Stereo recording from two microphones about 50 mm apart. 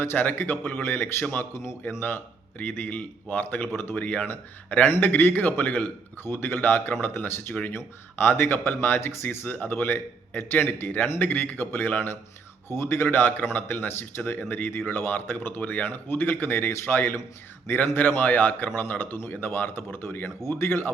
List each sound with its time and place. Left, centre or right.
0.0 s speech: left
1.4 s a man's voice: left
2.0 s speech: left
6.2 s speech: left
6.9 s speech: left
12.6 s speech: left